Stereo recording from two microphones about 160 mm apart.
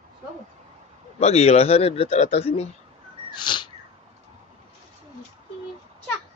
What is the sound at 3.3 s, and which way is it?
Sneeze, 30° left (ahead or behind).